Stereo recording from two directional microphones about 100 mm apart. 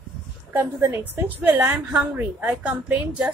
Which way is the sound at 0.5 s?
25° right (ahead or behind).